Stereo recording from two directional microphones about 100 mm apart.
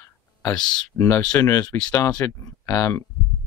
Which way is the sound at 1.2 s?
15° left (ahead or behind).